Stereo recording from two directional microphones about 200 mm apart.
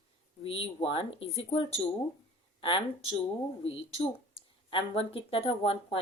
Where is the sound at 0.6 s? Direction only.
30° left (ahead or behind).